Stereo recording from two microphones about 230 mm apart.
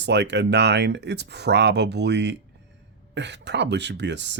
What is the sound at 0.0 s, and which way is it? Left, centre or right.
Speech, right.